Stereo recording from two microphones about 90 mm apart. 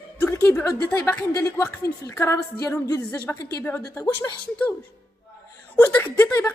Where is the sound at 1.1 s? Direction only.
30° left (ahead or behind).